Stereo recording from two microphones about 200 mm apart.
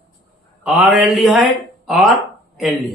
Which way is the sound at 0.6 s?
5° right (ahead or behind).